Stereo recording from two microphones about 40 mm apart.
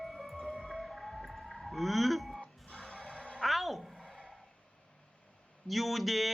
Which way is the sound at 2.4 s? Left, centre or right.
Left.